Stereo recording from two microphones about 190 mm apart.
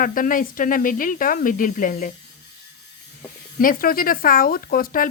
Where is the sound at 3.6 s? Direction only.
50° left (ahead or behind).